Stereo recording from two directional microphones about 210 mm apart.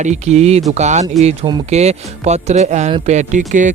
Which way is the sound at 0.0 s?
35° right (ahead or behind).